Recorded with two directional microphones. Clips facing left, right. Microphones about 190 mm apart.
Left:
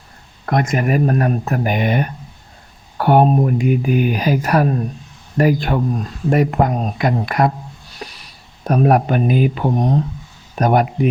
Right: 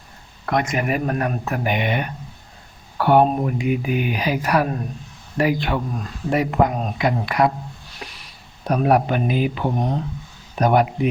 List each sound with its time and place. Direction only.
0.4 s speech: 45° left (ahead or behind)
8.0 s a sound: 35° left (ahead or behind)
8.6 s speech: 45° left (ahead or behind)